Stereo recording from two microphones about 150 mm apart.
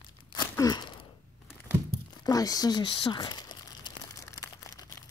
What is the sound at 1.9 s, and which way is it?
Crumpling, 25° left (ahead or behind).